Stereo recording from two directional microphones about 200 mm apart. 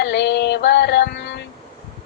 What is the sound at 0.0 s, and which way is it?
Music, 60° left (ahead or behind).